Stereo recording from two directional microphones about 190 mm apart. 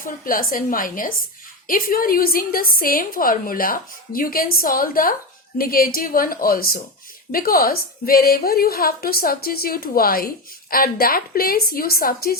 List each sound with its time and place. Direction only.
0.0 s a woman's voice: 45° left (ahead or behind)